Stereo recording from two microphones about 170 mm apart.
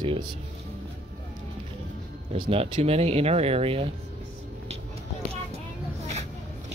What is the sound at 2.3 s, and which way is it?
Speech, 35° right (ahead or behind).